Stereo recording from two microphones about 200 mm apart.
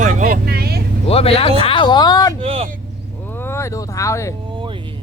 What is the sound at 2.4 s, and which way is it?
Speech, 30° right (ahead or behind).